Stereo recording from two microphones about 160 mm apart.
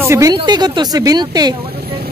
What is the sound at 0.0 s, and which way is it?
Speech, 20° right (ahead or behind).